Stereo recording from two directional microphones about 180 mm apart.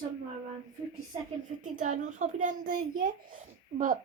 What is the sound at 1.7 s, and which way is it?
A woman's voice, 45° right (ahead or behind).